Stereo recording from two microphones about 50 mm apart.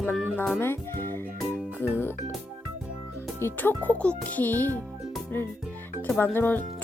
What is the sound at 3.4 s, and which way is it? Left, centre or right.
Speech, left.